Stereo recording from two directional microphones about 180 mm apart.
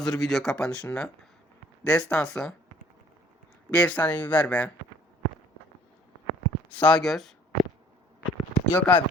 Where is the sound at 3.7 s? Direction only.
5° left (ahead or behind).